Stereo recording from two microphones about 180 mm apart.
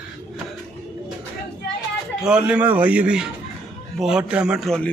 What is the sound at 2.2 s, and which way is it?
A man's voice, 5° right (ahead or behind).